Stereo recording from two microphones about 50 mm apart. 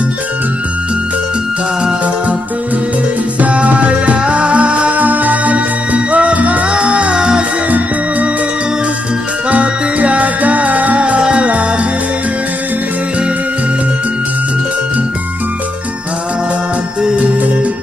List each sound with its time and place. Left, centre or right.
3.3 s music: right
9.5 s music: right
17.0 s organ: right